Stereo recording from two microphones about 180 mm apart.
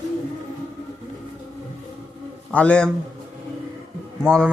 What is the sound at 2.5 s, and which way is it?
Speech, 5° left (ahead or behind).